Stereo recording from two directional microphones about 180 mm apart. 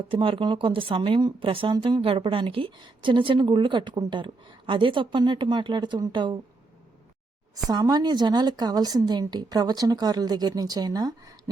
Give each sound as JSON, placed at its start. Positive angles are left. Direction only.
{"t": 0.1, "sound": "speech", "side_deg": -30}
{"t": 7.7, "sound": "speech", "side_deg": -20}